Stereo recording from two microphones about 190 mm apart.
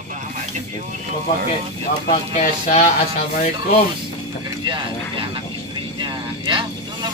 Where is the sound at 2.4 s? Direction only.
35° left (ahead or behind).